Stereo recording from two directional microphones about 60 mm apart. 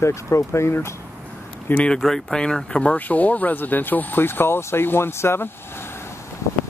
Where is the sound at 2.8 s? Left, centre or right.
Left.